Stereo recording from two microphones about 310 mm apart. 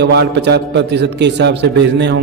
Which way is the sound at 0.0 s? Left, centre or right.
Right.